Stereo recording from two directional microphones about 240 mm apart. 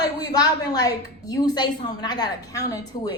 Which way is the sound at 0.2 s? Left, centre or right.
Centre.